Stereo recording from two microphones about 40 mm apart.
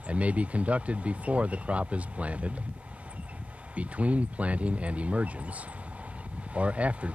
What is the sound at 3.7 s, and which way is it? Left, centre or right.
Speech, right.